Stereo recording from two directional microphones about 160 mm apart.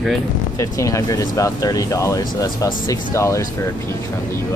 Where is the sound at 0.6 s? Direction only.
20° left (ahead or behind).